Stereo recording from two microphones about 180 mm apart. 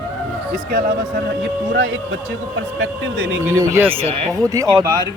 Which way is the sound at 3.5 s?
15° right (ahead or behind).